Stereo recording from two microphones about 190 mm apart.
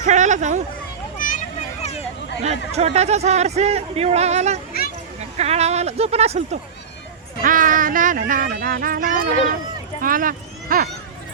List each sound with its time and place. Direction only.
0.0 s hubbub: 40° right (ahead or behind)
1.2 s children playing: 45° left (ahead or behind)
2.4 s speech: 35° right (ahead or behind)
7.4 s speech: 45° right (ahead or behind)